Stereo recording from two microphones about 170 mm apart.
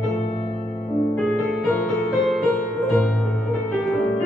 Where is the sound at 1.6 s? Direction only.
Centre (ahead or behind).